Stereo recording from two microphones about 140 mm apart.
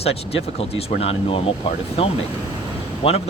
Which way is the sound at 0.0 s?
45° left (ahead or behind).